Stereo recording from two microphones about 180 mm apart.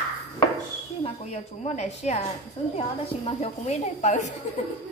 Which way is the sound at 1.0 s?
35° left (ahead or behind).